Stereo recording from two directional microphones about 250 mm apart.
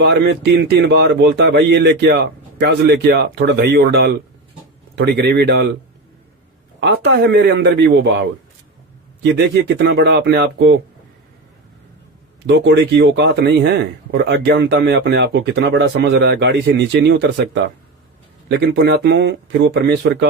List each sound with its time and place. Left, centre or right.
0.0 s speech: right
6.7 s speech: right
9.2 s speech: right
12.5 s speech: right